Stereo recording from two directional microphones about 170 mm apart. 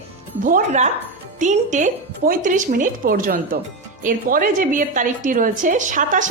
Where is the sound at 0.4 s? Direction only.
50° right (ahead or behind).